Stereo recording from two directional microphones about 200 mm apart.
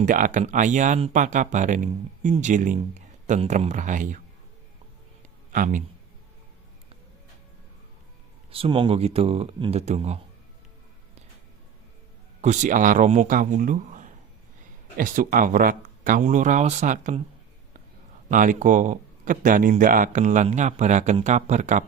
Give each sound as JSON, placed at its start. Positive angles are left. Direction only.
{"t": 0.0, "sound": "speech", "side_deg": -40}
{"t": 5.5, "sound": "speech", "side_deg": -40}
{"t": 8.4, "sound": "speech", "side_deg": -25}
{"t": 12.4, "sound": "speech", "side_deg": -35}
{"t": 18.3, "sound": "speech", "side_deg": -40}